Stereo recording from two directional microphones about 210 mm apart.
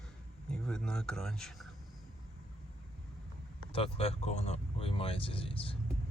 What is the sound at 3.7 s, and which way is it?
Speech, 25° left (ahead or behind).